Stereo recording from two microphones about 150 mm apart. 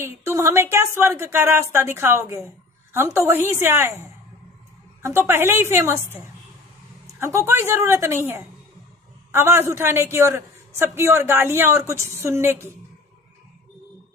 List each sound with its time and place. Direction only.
0.0 s a man's voice: 20° right (ahead or behind)
5.0 s a man's voice: 15° right (ahead or behind)
7.2 s a man's voice: 20° right (ahead or behind)